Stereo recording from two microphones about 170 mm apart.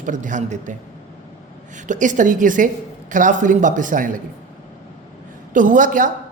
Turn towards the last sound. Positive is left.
turn(degrees=-50)  # may be behind; listen again after turning